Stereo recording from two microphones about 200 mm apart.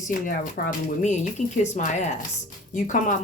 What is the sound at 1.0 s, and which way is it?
Speech, 35° left (ahead or behind).